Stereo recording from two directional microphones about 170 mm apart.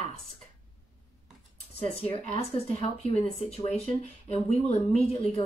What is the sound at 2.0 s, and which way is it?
Speech, 35° left (ahead or behind).